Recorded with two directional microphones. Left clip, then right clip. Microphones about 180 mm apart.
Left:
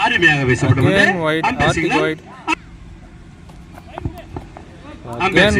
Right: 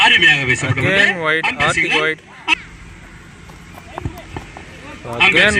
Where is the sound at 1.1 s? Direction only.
5° left (ahead or behind).